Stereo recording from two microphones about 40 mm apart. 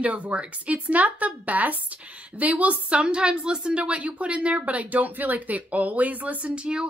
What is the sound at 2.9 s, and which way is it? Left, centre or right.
A woman's voice, right.